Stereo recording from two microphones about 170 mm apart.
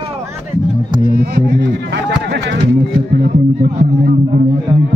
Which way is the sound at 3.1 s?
65° right (ahead or behind).